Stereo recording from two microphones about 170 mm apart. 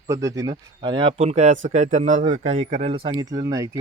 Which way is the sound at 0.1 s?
20° right (ahead or behind).